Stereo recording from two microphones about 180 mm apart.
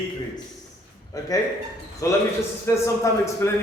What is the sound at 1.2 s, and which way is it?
A man's voice, 20° left (ahead or behind).